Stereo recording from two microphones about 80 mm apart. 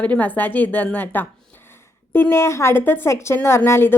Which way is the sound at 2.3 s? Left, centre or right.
Left.